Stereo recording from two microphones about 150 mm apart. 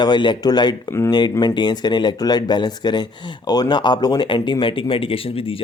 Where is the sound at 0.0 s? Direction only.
30° left (ahead or behind).